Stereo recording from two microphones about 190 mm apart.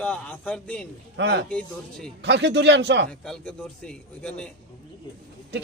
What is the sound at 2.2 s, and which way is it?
Speech, 65° right (ahead or behind).